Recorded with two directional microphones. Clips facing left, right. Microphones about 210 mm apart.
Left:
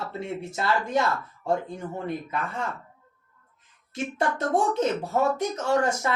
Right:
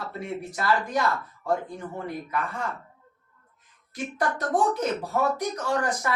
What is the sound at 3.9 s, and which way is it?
Speech, 25° left (ahead or behind).